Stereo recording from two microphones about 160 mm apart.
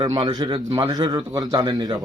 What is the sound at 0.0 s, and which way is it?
A man's voice, 30° right (ahead or behind).